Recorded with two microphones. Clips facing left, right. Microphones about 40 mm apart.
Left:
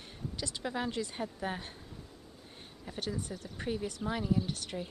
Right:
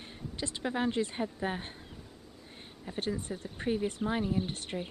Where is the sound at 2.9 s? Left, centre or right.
Right.